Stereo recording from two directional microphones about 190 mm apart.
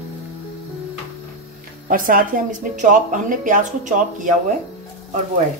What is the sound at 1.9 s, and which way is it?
Speech, 45° right (ahead or behind).